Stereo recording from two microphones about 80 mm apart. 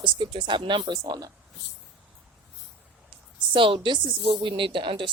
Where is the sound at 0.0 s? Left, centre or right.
Right.